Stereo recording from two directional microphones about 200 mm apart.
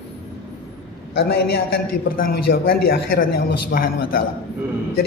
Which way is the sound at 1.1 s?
55° left (ahead or behind).